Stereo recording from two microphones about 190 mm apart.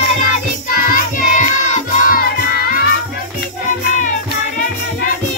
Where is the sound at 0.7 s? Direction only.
50° left (ahead or behind).